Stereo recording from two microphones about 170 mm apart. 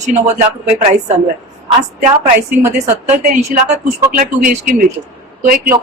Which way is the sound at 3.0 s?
40° right (ahead or behind).